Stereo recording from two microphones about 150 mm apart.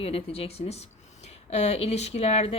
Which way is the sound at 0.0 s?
40° left (ahead or behind).